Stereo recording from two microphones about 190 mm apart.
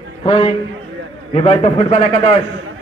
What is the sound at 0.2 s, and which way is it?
Speech, 30° left (ahead or behind).